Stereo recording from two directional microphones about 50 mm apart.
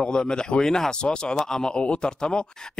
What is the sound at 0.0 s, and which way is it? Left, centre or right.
Speech, centre.